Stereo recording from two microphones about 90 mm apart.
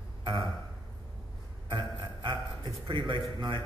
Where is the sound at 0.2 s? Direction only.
70° right (ahead or behind).